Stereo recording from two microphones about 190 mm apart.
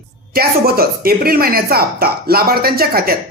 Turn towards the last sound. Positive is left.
turn(degrees=-55)  # may be behind; listen again after turning